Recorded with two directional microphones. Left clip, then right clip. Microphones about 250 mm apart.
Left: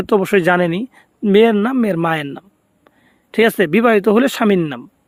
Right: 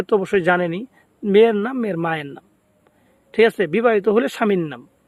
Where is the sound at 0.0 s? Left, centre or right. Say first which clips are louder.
Left 4 dB; left.